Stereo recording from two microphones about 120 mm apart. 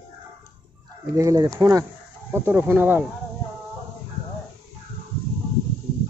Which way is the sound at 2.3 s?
15° right (ahead or behind).